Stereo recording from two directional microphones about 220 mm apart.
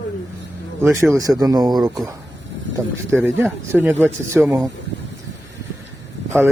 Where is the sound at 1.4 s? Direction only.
15° right (ahead or behind).